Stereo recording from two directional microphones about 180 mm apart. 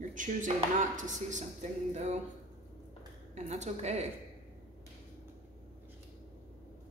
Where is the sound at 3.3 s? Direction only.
40° right (ahead or behind).